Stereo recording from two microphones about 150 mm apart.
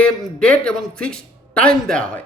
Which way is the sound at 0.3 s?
5° left (ahead or behind).